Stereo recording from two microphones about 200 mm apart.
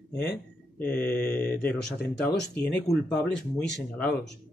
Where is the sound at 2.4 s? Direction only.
50° left (ahead or behind).